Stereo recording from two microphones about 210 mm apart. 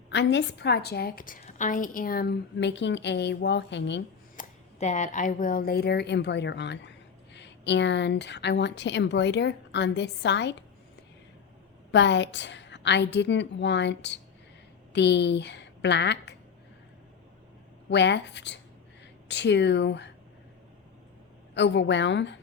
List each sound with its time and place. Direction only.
0.1 s a woman's voice: 55° left (ahead or behind)
4.4 s a woman's voice: 35° left (ahead or behind); by 10.5 s 55° left (ahead or behind)
11.9 s a woman's voice: 55° left (ahead or behind)
17.9 s a woman's voice: 55° left (ahead or behind)
21.5 s a woman's voice: 55° left (ahead or behind)